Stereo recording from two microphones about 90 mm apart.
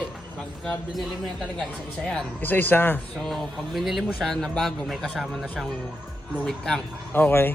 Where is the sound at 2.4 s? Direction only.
20° left (ahead or behind).